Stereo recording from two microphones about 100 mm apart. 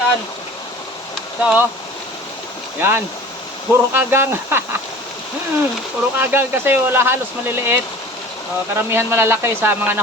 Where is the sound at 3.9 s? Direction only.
25° right (ahead or behind).